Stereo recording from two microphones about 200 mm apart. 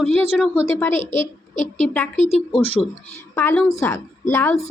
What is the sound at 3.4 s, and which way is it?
A woman's voice, 10° left (ahead or behind).